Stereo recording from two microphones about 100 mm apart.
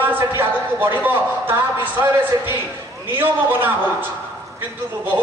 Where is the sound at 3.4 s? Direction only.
20° right (ahead or behind).